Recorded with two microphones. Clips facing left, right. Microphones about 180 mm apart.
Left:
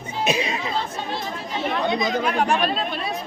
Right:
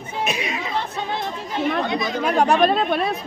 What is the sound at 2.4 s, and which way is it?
Speech, 45° right (ahead or behind).